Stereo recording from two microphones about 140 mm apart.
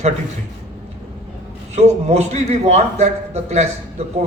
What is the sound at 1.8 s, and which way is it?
A man's voice, 50° right (ahead or behind).